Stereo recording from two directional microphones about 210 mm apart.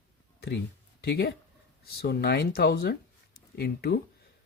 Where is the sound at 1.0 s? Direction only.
50° left (ahead or behind).